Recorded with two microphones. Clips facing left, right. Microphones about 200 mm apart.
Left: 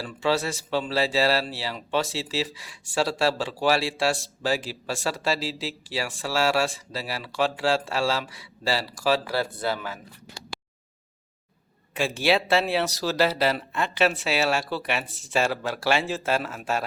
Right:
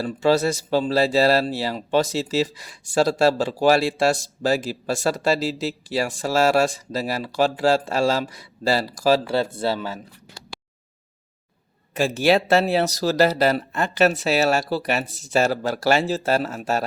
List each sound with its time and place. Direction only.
0.1 s speech: 40° right (ahead or behind)
9.2 s speech: 25° right (ahead or behind)
11.9 s speech: 45° right (ahead or behind)